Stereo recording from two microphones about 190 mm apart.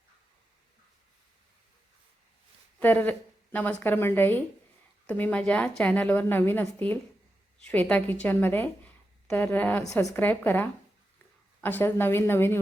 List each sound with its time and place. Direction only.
2.7 s a woman's voice: 10° left (ahead or behind)